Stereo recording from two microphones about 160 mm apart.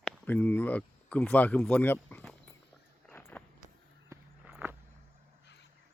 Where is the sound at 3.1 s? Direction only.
10° left (ahead or behind).